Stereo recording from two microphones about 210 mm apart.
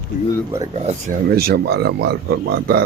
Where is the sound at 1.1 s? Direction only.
45° right (ahead or behind).